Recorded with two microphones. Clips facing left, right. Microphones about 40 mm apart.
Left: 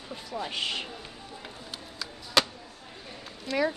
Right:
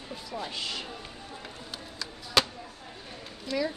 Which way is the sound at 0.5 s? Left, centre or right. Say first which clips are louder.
Left 3 dB; left.